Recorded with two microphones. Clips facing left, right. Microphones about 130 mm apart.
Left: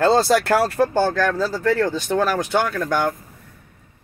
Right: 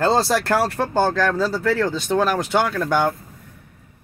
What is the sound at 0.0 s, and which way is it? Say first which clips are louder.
Speech: left 2 dB; centre (ahead or behind).